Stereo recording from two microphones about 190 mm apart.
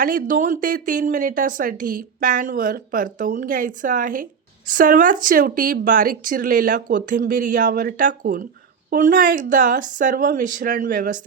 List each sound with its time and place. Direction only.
0.0 s speech: 45° right (ahead or behind)